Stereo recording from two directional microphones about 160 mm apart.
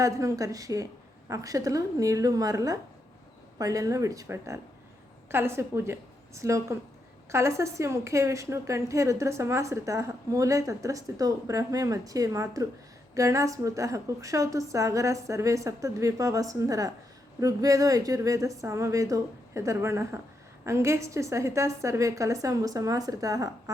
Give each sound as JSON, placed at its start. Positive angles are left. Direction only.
{"t": 0.0, "sound": "a woman's voice", "side_deg": -20}